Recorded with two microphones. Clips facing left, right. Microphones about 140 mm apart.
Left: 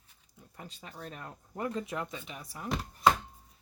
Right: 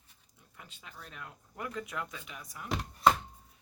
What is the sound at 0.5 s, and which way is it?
Speech, 35° left (ahead or behind).